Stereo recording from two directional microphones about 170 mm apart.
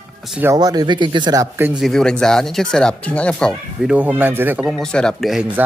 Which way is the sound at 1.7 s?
Centre (ahead or behind).